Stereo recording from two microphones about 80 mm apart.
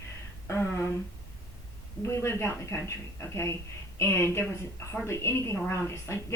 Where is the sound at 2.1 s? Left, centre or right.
Left.